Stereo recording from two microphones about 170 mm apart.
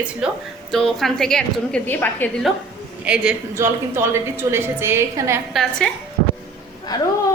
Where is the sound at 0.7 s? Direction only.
Centre (ahead or behind).